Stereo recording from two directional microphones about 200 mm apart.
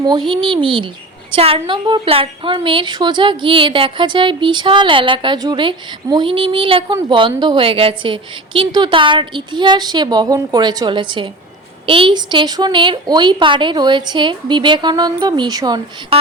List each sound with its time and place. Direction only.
0.0 s a woman's voice: 20° right (ahead or behind)